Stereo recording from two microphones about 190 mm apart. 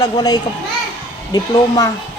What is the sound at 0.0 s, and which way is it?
Speech, 20° left (ahead or behind).